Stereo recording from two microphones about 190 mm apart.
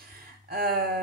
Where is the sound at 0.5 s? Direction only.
55° right (ahead or behind).